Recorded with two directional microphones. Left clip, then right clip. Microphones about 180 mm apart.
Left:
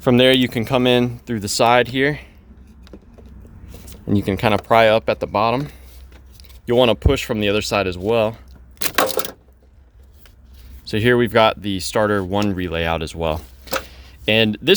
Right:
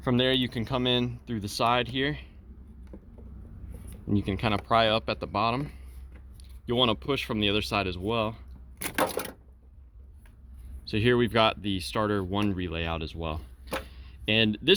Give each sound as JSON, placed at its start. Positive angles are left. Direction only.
{"t": 0.0, "sound": "speech", "side_deg": 55}
{"t": 3.8, "sound": "speech", "side_deg": 45}
{"t": 10.8, "sound": "speech", "side_deg": 40}
{"t": 13.8, "sound": "a sound", "side_deg": 40}